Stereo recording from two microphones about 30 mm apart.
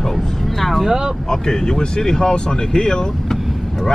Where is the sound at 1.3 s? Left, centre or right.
Left.